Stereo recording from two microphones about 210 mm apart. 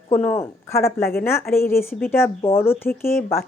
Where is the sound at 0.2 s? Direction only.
10° left (ahead or behind).